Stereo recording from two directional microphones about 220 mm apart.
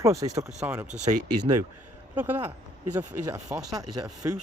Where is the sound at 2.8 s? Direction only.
90° right.